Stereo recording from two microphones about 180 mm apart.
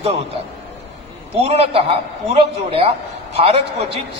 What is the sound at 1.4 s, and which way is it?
A man's voice, 35° right (ahead or behind).